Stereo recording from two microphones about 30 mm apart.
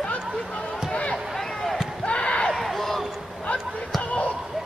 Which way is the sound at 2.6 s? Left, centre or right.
Centre.